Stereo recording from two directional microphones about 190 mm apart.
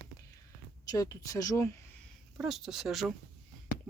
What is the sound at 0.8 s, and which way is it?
Speech, 20° left (ahead or behind).